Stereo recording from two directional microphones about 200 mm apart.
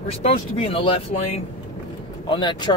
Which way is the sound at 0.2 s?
30° left (ahead or behind).